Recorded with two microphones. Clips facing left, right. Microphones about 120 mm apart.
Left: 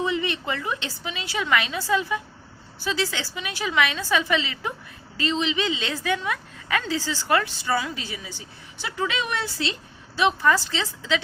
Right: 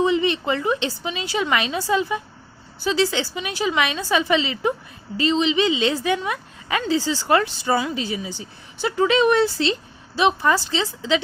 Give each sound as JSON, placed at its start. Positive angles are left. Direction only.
{"t": 0.0, "sound": "a woman's voice", "side_deg": -25}
{"t": 8.8, "sound": "a woman's voice", "side_deg": -30}